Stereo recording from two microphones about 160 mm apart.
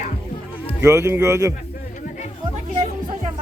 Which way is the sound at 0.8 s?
15° right (ahead or behind).